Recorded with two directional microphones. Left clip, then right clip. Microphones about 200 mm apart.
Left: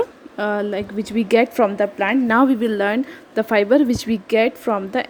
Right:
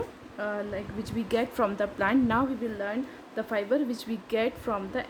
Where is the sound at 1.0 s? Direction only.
30° left (ahead or behind).